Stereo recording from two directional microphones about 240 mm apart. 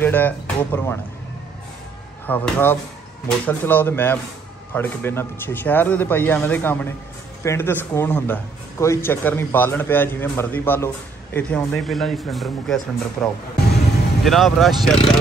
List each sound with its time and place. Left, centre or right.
0.0 s speech: centre
2.2 s a man's voice: centre